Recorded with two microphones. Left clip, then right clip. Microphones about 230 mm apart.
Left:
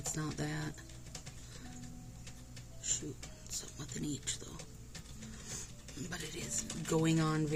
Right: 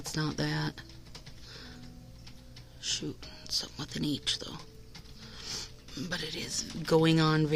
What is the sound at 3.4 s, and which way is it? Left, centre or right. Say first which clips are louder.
Speech: right 12 dB; right.